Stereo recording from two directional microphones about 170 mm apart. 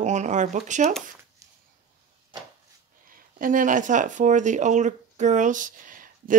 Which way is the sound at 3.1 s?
55° right (ahead or behind).